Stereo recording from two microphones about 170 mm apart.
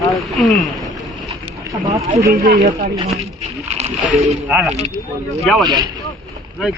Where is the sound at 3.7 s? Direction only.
40° right (ahead or behind).